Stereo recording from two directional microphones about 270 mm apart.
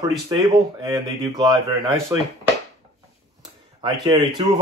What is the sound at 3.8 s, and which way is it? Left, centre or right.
Speech, centre.